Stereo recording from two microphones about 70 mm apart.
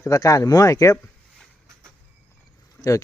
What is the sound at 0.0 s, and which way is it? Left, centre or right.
Speech, left.